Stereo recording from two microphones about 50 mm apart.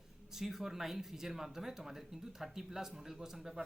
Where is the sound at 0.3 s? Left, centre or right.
Centre.